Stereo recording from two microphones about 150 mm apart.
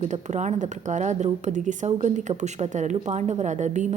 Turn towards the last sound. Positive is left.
turn(degrees=-50)  # may be behind; listen again after turning